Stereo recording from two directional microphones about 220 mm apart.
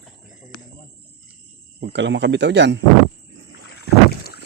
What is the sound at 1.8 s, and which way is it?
Speech, 55° right (ahead or behind).